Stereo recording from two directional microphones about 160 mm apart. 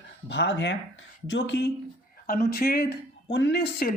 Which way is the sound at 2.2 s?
65° left (ahead or behind).